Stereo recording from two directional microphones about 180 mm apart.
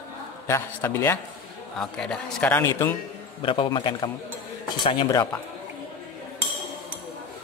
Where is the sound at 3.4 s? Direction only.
30° left (ahead or behind).